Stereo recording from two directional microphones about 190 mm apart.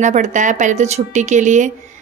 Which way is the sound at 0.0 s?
40° right (ahead or behind).